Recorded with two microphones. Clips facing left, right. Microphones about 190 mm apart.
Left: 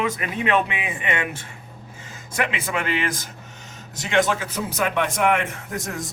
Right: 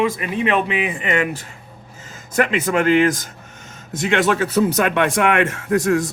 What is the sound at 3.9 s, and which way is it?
Speech, 55° right (ahead or behind).